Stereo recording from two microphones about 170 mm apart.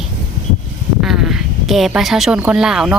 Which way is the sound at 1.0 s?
5° right (ahead or behind).